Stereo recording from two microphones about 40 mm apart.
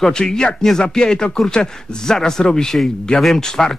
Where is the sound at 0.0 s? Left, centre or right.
Centre.